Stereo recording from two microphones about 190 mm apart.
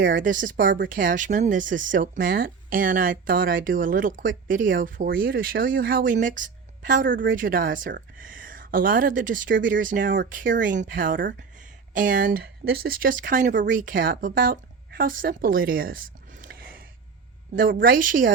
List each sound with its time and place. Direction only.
0.0 s speech: 45° right (ahead or behind)